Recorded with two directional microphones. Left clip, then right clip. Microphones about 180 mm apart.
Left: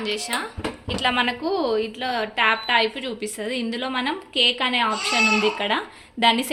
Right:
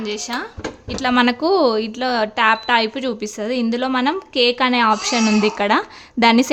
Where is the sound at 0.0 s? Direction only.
50° right (ahead or behind).